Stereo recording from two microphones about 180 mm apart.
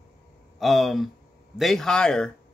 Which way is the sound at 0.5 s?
Centre (ahead or behind).